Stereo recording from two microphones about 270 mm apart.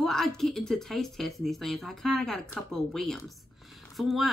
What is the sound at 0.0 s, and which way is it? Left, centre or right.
Speech, centre.